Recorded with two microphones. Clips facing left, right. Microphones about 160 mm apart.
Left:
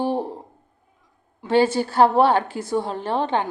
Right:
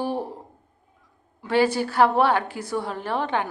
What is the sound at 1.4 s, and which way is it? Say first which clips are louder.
A woman's voice: left 3 dB; 25° left (ahead or behind).